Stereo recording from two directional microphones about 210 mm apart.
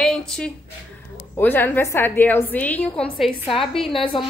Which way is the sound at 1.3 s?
10° left (ahead or behind).